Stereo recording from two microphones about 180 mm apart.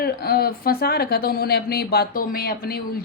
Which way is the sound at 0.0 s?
60° left (ahead or behind).